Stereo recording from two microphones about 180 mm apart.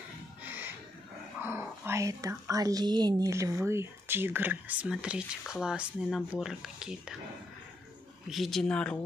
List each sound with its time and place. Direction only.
0.4 s a sound: 10° right (ahead or behind)
1.4 s speech: 15° right (ahead or behind)
8.3 s speech: centre (ahead or behind)